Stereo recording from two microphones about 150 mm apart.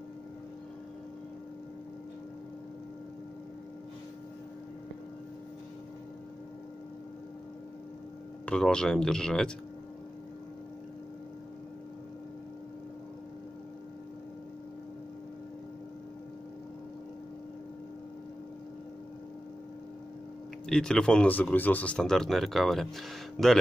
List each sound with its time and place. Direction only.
8.5 s speech: 5° left (ahead or behind)
20.6 s speech: 5° left (ahead or behind)